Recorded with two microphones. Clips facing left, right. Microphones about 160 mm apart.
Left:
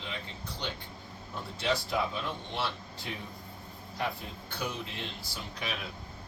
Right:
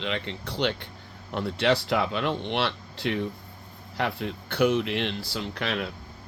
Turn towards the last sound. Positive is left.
turn(degrees=-70)  # may be behind; listen again after turning